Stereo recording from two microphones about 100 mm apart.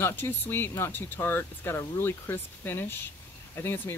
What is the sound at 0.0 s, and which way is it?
Speech, 20° left (ahead or behind).